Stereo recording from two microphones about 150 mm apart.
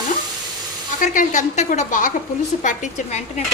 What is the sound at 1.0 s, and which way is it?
A woman's voice, 55° left (ahead or behind).